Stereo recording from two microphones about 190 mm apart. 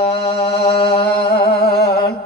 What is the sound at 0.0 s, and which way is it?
Mantra, 55° left (ahead or behind).